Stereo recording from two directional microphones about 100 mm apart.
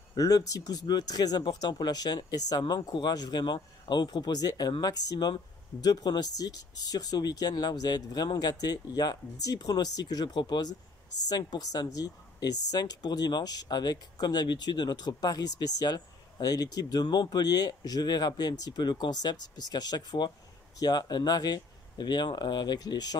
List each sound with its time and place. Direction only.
0.2 s speech: 40° left (ahead or behind)